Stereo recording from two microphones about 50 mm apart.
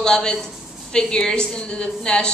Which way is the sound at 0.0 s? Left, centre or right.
Centre.